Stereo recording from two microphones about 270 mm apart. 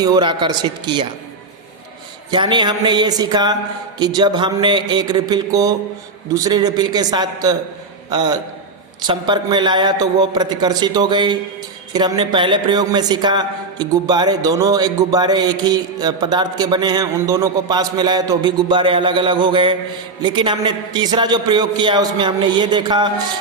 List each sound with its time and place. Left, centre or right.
0.0 s speech: centre
2.3 s speech: centre